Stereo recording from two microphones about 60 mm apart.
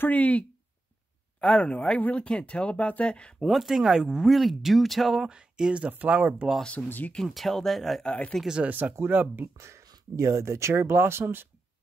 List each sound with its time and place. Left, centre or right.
0.0 s speech: left
3.3 s speech: centre
5.3 s speech: centre
6.6 s speech: centre
7.2 s speech: centre
8.0 s speech: centre
8.6 s speech: right
8.9 s speech: right
9.6 s speech: right